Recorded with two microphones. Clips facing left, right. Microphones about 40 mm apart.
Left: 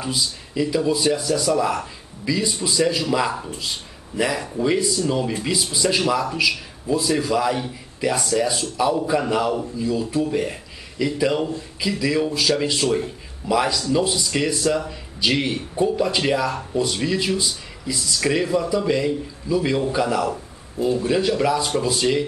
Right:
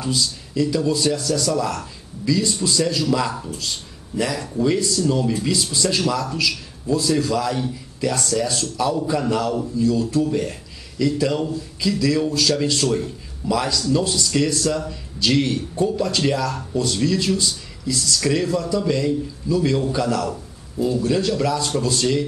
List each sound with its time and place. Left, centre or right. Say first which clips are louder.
0.0 s a man's voice: right 2 dB; centre